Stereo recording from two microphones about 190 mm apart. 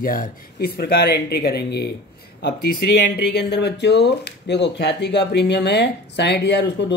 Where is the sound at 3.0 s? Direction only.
60° left (ahead or behind).